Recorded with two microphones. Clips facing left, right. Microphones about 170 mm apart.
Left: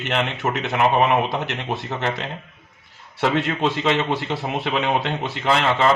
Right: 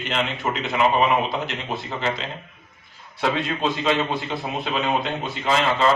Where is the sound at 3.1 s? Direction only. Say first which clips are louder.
Left 3 dB; 70° left (ahead or behind).